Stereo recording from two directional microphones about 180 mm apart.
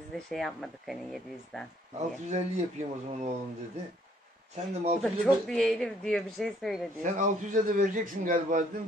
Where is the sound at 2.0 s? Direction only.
40° right (ahead or behind).